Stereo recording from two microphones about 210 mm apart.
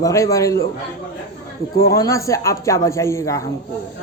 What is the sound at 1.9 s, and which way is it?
Speech, 15° left (ahead or behind).